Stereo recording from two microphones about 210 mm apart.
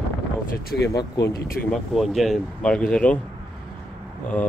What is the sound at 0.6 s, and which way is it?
Speech, 50° left (ahead or behind).